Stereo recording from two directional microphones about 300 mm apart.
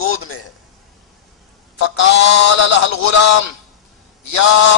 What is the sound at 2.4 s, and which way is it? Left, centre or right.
Speech, left.